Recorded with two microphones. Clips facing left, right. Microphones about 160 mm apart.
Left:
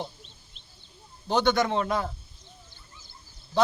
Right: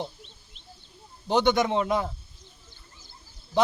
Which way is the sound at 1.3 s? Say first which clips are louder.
Right 1 dB; 20° right (ahead or behind).